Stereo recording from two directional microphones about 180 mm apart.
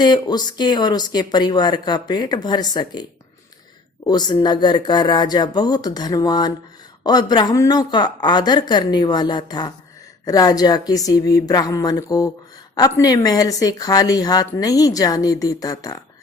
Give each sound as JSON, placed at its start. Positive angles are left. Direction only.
{"t": 0.0, "sound": "a woman's voice", "side_deg": 25}